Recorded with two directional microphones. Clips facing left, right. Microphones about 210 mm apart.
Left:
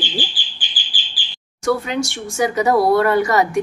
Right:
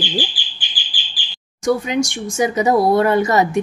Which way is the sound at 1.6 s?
15° right (ahead or behind).